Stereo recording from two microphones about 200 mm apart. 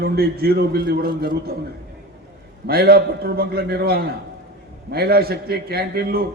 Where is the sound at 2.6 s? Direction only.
50° right (ahead or behind).